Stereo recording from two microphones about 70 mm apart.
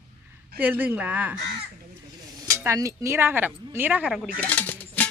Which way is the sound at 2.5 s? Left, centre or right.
Right.